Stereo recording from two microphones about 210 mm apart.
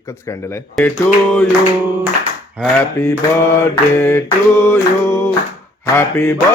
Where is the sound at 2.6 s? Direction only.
5° right (ahead or behind).